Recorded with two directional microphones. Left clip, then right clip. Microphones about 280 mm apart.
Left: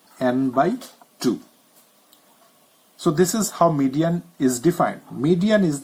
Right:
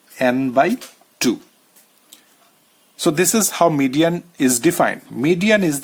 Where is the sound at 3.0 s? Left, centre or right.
Right.